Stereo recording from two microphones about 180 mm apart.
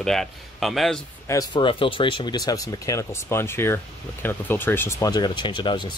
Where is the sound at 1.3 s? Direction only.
20° left (ahead or behind).